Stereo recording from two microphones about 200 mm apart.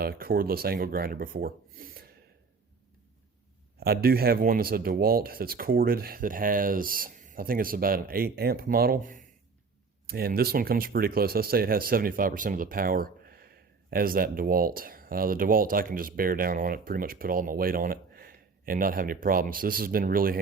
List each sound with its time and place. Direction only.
0.0 s speech: 50° right (ahead or behind)
3.8 s speech: 50° right (ahead or behind)